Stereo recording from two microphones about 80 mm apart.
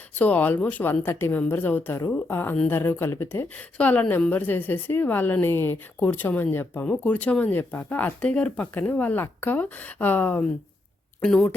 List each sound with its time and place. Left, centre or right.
0.2 s speech: left
3.8 s a woman's voice: centre
11.2 s a woman's voice: centre